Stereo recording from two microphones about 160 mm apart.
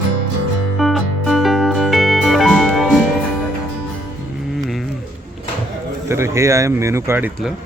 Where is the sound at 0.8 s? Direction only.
Centre (ahead or behind).